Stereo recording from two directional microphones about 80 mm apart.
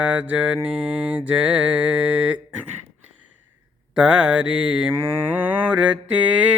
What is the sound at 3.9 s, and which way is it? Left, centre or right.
Mantra, centre.